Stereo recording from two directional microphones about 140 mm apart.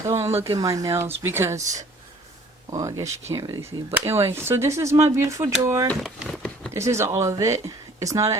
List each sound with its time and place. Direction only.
0.0 s speech: 20° right (ahead or behind)
2.7 s speech: 20° right (ahead or behind)
6.2 s a sound: 5° left (ahead or behind)
6.7 s speech: 20° right (ahead or behind)